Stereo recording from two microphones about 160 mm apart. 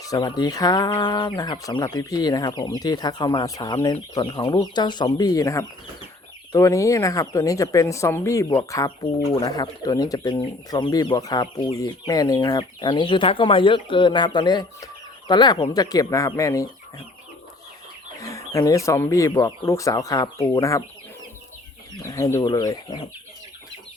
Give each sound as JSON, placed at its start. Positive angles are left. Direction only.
{"t": 0.1, "sound": "speech", "side_deg": 25}
{"t": 18.2, "sound": "chicken", "side_deg": 20}
{"t": 18.9, "sound": "speech", "side_deg": 15}
{"t": 22.1, "sound": "speech", "side_deg": 15}